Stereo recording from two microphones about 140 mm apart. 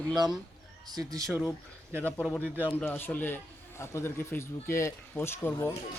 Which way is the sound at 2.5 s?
15° right (ahead or behind).